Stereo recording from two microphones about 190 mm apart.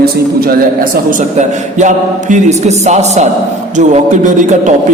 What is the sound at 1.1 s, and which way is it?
A man's voice, 40° right (ahead or behind).